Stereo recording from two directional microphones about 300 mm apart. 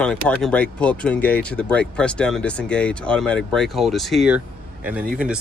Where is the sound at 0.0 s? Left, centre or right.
Centre.